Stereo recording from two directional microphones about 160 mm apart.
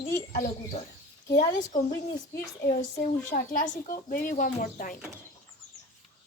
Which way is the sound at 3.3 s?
55° left (ahead or behind).